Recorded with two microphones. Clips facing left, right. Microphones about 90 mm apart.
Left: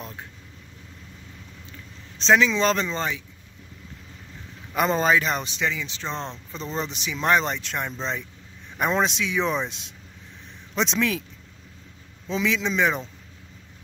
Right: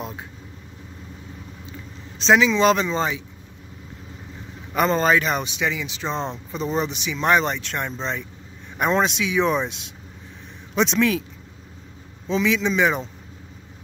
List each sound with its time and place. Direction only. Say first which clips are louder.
0.0 s vehicle: right 5 dB; 20° right (ahead or behind)
2.1 s speech: right 2 dB; 5° right (ahead or behind)
4.7 s speech: right 2 dB; centre (ahead or behind); by 6.9 s 15° right (ahead or behind)
6.9 s speech: left 1 dB; centre (ahead or behind)
12.3 s speech: right 4 dB; centre (ahead or behind)